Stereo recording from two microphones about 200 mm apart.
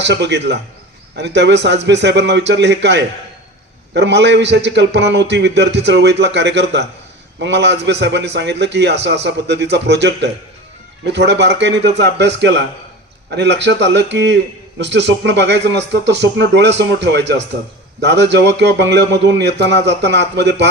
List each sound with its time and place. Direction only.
0.0 s a man's voice: 60° right (ahead or behind)